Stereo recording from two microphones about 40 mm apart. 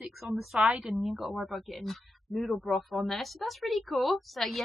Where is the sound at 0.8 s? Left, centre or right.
Centre.